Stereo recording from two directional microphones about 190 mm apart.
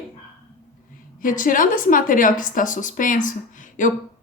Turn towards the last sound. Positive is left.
turn(degrees=40)  # may be behind; listen again after turning